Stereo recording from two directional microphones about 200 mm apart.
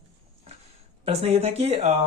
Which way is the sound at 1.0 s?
30° right (ahead or behind).